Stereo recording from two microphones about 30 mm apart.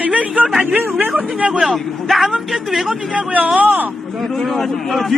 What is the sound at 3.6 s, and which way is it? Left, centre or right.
Speech, right.